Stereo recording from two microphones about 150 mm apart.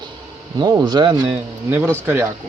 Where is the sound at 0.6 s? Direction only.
25° right (ahead or behind).